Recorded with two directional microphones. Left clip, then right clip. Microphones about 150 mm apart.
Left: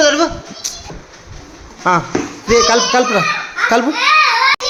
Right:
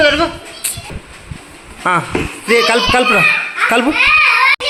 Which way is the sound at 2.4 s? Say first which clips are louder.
Even; centre (ahead or behind).